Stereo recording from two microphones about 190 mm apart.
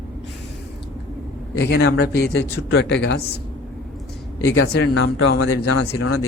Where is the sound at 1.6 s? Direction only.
60° left (ahead or behind).